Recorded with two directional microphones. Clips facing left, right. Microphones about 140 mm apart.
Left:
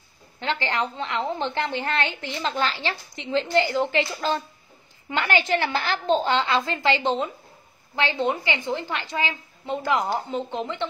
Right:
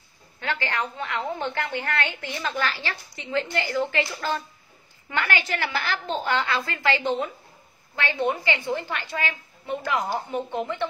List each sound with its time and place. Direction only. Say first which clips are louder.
0.4 s a woman's voice: left 2 dB; 25° left (ahead or behind)